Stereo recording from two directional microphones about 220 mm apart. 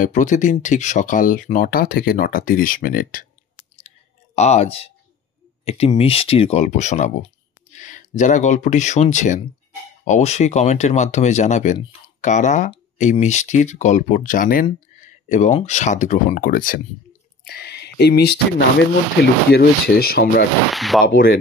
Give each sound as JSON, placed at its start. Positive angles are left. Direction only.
{"t": 0.0, "sound": "speech", "side_deg": 35}
{"t": 4.4, "sound": "speech", "side_deg": 30}
{"t": 19.5, "sound": "speech", "side_deg": 45}
{"t": 20.7, "sound": "speech", "side_deg": 0}
{"t": 21.1, "sound": "speech", "side_deg": 45}